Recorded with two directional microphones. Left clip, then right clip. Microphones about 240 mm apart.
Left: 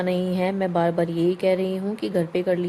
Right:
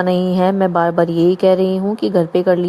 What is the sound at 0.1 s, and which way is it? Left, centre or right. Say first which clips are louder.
A woman's voice: right 9 dB; right.